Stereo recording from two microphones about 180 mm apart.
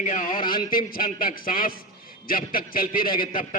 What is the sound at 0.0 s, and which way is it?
A man's voice, 45° left (ahead or behind).